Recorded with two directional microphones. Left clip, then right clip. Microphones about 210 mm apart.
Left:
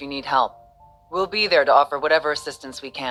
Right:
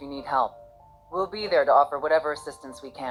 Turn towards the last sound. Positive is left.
turn(degrees=25)  # may be behind; listen again after turning